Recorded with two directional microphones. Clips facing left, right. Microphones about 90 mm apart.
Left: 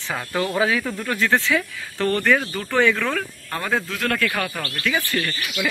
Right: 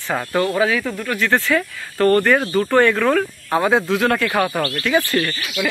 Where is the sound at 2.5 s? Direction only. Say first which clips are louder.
Right 5 dB; 15° right (ahead or behind).